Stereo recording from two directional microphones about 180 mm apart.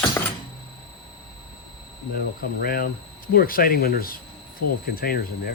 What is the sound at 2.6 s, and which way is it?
Speech, 55° left (ahead or behind).